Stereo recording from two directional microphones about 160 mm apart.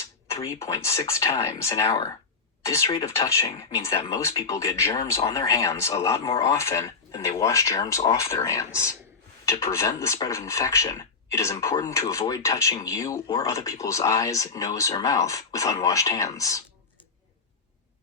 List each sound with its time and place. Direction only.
0.3 s speech: 20° left (ahead or behind)